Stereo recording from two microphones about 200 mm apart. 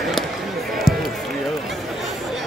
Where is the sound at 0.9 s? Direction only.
50° left (ahead or behind).